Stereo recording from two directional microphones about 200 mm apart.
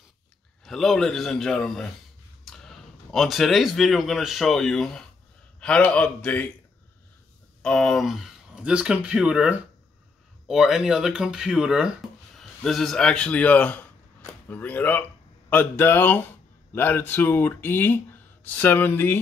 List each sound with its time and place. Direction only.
0.7 s speech: centre (ahead or behind)
7.6 s speech: 5° left (ahead or behind)